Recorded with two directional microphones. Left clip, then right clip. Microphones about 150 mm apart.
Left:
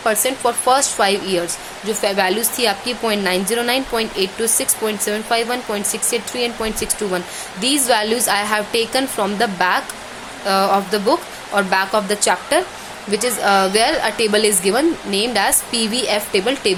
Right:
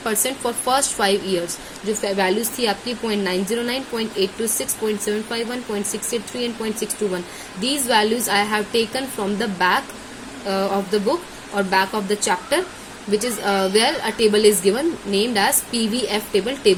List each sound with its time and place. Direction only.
0.0 s speech: 5° left (ahead or behind)